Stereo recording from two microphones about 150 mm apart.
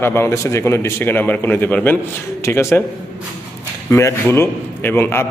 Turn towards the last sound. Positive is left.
turn(degrees=15)  # may be behind; listen again after turning